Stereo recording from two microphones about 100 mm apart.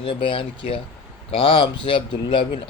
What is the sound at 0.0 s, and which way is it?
Speech, 55° left (ahead or behind).